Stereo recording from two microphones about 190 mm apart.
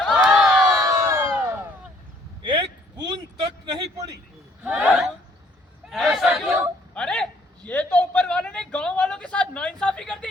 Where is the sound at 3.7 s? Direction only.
20° right (ahead or behind).